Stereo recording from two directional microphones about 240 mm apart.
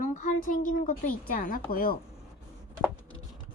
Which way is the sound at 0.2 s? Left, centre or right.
Left.